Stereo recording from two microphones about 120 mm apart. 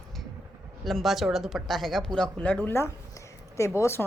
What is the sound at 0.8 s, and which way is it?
A woman's voice, centre (ahead or behind).